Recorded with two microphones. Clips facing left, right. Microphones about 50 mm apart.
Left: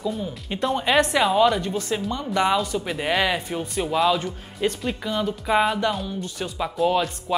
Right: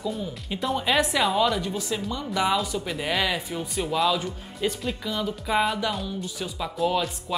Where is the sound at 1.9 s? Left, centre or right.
Left.